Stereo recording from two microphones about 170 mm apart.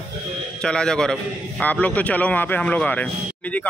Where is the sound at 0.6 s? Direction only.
5° left (ahead or behind).